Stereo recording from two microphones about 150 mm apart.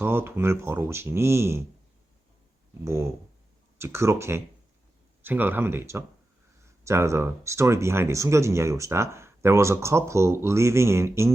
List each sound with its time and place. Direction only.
0.0 s speech: 15° right (ahead or behind)
2.8 s speech: 15° right (ahead or behind)